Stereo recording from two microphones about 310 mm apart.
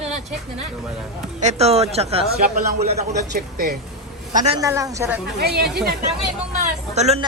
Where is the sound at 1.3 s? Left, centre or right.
Right.